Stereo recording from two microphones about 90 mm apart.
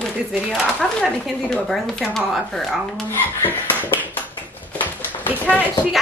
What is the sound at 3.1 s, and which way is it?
Speech, 20° left (ahead or behind).